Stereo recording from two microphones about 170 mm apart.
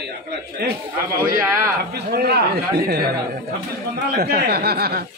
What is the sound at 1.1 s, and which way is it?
Speech, 55° right (ahead or behind).